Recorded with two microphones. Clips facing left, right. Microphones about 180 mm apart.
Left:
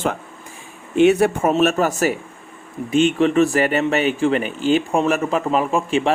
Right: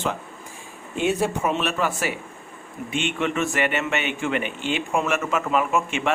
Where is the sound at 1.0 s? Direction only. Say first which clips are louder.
Left 7 dB; 65° left (ahead or behind).